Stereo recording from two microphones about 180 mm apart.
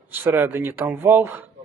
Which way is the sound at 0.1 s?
10° right (ahead or behind).